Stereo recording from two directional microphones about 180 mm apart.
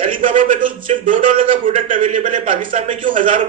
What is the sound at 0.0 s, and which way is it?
A man's voice, 45° right (ahead or behind).